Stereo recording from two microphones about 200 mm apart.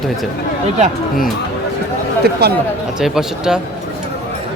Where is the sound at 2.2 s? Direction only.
55° right (ahead or behind).